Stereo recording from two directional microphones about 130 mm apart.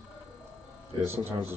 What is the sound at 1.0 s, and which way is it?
Speech, 15° right (ahead or behind).